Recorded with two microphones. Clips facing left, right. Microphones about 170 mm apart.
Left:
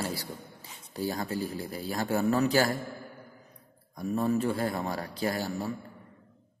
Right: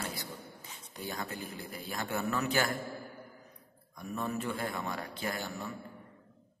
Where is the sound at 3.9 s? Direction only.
35° left (ahead or behind).